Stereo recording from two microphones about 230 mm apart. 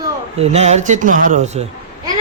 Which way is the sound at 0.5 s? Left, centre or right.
Right.